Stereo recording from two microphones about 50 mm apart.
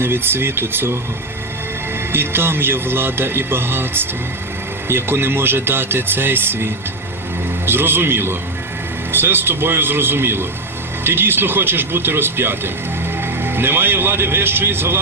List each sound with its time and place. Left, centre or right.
0.0 s speech: right
2.1 s speech: right